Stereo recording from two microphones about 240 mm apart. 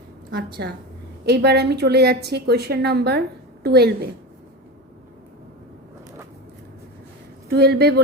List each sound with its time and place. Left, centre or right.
0.3 s a woman's voice: right
7.5 s speech: right